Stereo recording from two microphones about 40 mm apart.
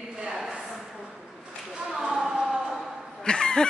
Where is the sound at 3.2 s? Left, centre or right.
Centre.